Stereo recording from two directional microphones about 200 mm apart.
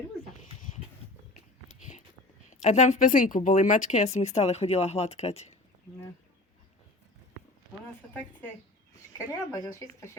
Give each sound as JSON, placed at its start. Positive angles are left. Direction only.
{"t": 2.5, "sound": "speech", "side_deg": 35}
{"t": 9.1, "sound": "speech", "side_deg": 15}